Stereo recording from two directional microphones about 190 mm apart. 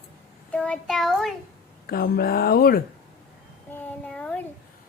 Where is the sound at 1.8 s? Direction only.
55° left (ahead or behind).